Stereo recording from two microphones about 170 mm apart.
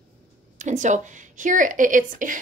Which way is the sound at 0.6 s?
45° right (ahead or behind).